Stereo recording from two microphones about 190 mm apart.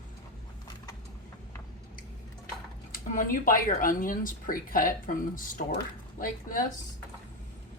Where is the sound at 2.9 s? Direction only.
45° left (ahead or behind).